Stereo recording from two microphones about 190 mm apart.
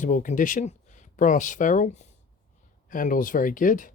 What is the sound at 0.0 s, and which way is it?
Speech, 45° left (ahead or behind).